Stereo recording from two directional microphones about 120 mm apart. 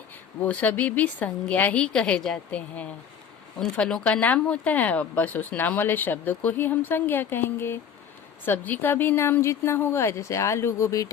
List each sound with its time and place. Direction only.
0.4 s speech: 15° left (ahead or behind)